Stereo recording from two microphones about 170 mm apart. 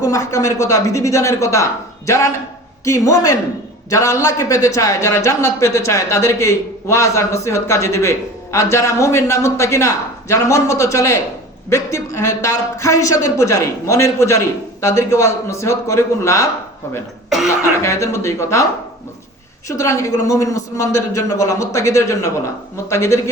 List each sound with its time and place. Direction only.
0.0 s a man's voice: 20° left (ahead or behind)
17.2 s speech: centre (ahead or behind)
17.8 s a man's voice: 15° left (ahead or behind)
19.6 s a woman's voice: 20° left (ahead or behind)